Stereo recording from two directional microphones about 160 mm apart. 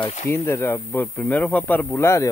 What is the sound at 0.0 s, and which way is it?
Speech, 45° left (ahead or behind).